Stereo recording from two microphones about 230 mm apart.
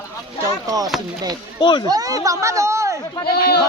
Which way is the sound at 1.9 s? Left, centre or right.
Centre.